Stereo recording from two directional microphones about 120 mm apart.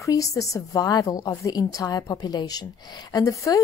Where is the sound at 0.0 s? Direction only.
30° left (ahead or behind).